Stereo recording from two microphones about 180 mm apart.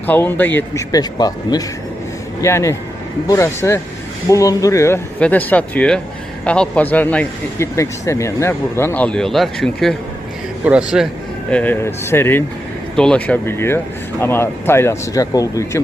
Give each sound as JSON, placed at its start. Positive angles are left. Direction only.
{"t": 0.1, "sound": "speech", "side_deg": 10}
{"t": 0.9, "sound": "a man's voice", "side_deg": 20}
{"t": 11.5, "sound": "speech", "side_deg": 10}